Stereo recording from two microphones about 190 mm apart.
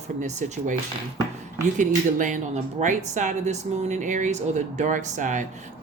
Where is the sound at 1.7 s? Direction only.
40° right (ahead or behind).